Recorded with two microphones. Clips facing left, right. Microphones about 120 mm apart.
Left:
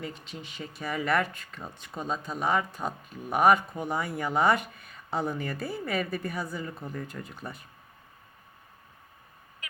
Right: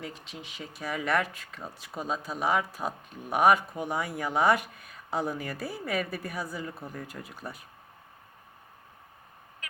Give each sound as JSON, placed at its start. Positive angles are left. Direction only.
{"t": 0.0, "sound": "speech", "side_deg": 0}